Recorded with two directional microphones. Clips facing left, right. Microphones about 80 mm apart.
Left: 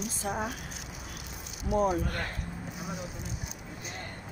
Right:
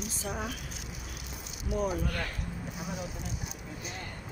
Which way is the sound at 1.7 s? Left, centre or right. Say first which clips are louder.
Left 4 dB; left.